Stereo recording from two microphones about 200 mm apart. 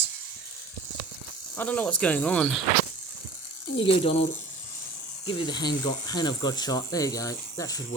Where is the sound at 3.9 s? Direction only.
25° left (ahead or behind).